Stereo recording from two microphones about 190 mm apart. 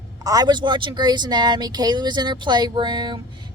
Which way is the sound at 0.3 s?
20° right (ahead or behind).